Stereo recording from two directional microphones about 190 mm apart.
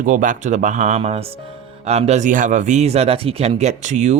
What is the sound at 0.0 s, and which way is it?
Speech, 45° right (ahead or behind).